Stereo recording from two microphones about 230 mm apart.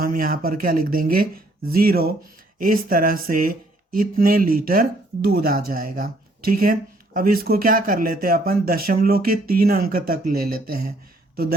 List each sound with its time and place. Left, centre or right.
0.0 s speech: right